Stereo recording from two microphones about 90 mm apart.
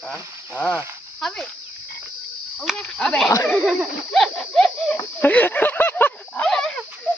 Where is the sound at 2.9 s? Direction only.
10° left (ahead or behind).